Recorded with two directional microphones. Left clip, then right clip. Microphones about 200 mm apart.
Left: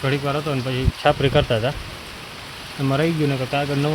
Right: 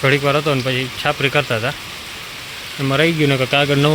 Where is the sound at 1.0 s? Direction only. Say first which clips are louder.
Even; 15° left (ahead or behind).